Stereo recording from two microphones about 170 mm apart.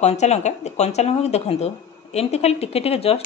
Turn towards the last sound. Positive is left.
turn(degrees=35)  # may be behind; listen again after turning